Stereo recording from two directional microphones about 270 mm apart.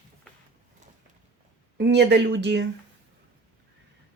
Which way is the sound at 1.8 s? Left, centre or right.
Right.